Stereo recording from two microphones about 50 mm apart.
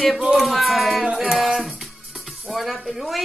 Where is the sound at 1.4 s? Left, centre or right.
Centre.